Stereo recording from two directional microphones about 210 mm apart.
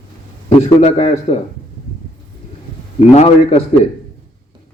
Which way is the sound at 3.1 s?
30° left (ahead or behind).